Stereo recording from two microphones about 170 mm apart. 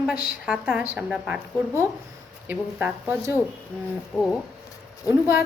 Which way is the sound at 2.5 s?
10° right (ahead or behind).